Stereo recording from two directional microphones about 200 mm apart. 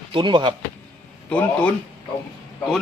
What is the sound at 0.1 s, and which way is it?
Speech, 25° right (ahead or behind).